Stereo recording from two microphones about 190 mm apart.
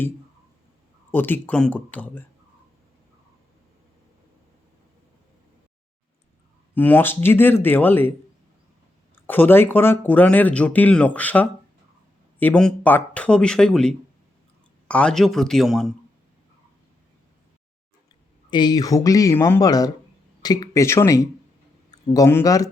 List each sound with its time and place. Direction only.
1.1 s speech: 10° left (ahead or behind)
6.7 s speech: 10° left (ahead or behind)
9.2 s speech: 10° left (ahead or behind)
18.5 s speech: 20° left (ahead or behind)